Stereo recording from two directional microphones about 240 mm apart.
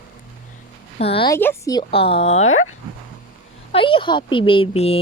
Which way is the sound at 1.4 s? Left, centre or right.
Centre.